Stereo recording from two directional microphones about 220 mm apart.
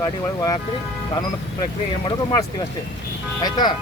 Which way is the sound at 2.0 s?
20° left (ahead or behind).